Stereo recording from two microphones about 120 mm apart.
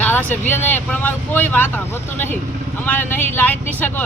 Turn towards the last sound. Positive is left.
turn(degrees=15)  # may be behind; listen again after turning